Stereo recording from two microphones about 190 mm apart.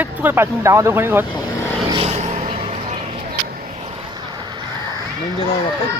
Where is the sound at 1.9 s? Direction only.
35° right (ahead or behind).